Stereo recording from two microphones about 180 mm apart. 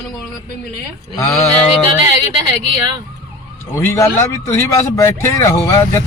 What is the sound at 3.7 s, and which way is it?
Speech, 15° left (ahead or behind).